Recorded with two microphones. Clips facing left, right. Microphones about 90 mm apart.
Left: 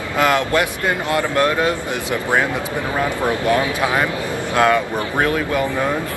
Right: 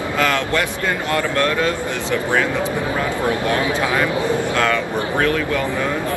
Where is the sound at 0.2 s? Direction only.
20° left (ahead or behind).